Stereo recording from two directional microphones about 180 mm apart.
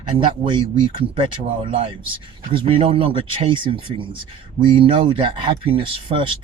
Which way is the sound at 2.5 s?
30° right (ahead or behind).